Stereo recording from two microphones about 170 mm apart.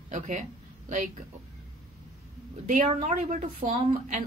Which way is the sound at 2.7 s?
50° right (ahead or behind).